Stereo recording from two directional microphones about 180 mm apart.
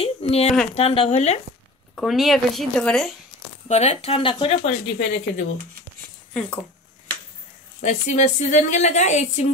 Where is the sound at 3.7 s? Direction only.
35° left (ahead or behind).